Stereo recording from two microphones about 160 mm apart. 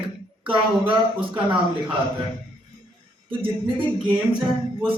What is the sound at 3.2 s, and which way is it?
Speech, 35° right (ahead or behind).